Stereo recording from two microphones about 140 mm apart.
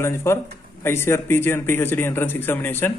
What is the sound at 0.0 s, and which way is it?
A man's voice, 20° left (ahead or behind).